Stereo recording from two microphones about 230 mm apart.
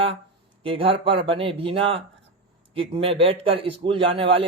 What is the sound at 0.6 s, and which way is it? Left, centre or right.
Speech, right.